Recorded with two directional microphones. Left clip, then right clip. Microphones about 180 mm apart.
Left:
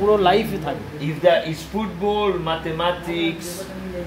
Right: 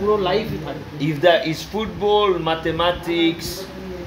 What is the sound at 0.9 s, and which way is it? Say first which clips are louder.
Speech: right 2 dB; 60° right (ahead or behind).